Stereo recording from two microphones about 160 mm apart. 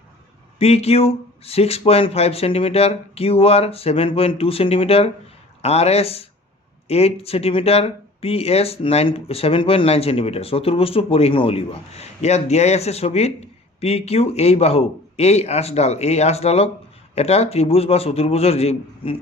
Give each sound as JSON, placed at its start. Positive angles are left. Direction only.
{"t": 0.6, "sound": "speech", "side_deg": 40}